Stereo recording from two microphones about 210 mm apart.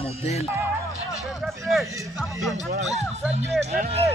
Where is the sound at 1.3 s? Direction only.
Centre (ahead or behind).